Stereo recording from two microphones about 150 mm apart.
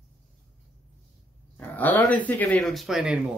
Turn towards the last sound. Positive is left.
turn(degrees=-5)  # may be behind; listen again after turning